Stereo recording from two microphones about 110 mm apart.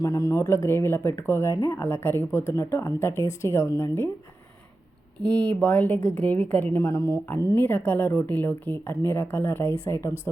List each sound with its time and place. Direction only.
0.0 s speech: 30° left (ahead or behind)
5.2 s a woman's voice: 10° left (ahead or behind)